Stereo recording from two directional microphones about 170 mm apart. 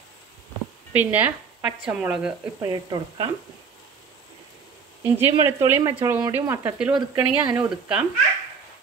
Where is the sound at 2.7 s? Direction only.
25° right (ahead or behind).